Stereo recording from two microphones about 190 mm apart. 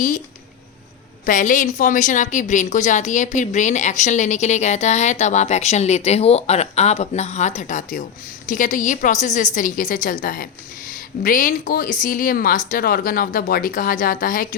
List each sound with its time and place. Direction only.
1.2 s a woman's voice: 45° left (ahead or behind)